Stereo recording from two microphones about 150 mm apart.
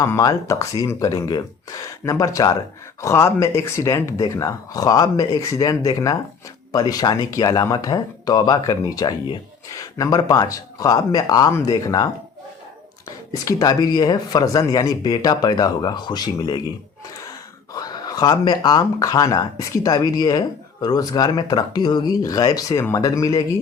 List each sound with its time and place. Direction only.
0.0 s speech: 20° left (ahead or behind)
13.3 s speech: 20° left (ahead or behind)
17.7 s speech: 25° left (ahead or behind)